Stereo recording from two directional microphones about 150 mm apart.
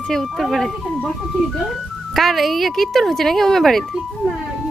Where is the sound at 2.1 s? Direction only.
Centre (ahead or behind).